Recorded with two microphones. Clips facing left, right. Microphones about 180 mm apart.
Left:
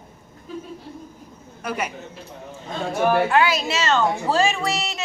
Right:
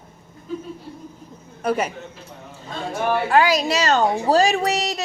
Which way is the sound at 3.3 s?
35° right (ahead or behind).